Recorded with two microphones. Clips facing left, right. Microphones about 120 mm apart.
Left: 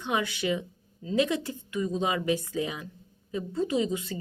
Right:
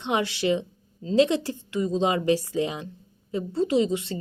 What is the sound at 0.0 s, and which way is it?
Speech, 25° right (ahead or behind).